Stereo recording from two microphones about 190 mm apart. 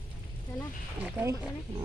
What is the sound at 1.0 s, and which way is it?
Speech, 15° right (ahead or behind).